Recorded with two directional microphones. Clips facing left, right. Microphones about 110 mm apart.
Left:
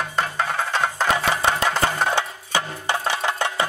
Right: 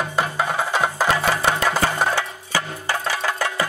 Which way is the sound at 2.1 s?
20° left (ahead or behind).